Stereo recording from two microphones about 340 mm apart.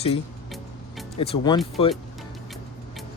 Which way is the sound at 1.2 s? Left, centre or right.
Centre.